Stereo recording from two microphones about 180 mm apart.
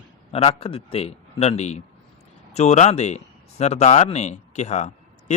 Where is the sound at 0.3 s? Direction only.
35° left (ahead or behind).